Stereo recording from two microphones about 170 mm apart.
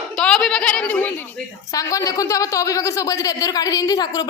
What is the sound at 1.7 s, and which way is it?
A woman's voice, 20° left (ahead or behind).